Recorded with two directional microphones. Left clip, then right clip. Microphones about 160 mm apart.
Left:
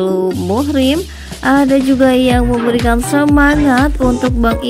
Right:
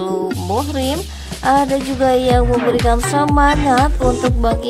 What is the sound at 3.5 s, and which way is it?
Speech, 5° left (ahead or behind).